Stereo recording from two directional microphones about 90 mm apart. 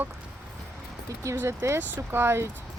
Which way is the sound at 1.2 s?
30° right (ahead or behind).